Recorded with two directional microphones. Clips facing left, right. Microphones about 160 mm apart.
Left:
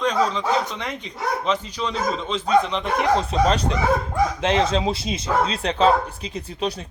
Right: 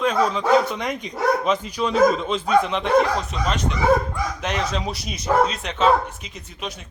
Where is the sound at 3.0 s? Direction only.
30° left (ahead or behind).